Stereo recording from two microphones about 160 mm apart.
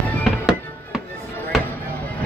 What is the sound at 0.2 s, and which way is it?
Music, centre (ahead or behind).